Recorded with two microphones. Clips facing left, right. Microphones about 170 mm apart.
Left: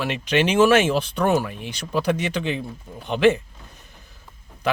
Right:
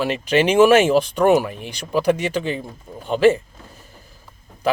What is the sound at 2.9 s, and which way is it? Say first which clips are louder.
Speech: right 2 dB; 40° right (ahead or behind).